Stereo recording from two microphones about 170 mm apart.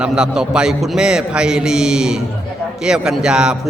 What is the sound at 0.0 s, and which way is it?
A man's voice, 5° right (ahead or behind).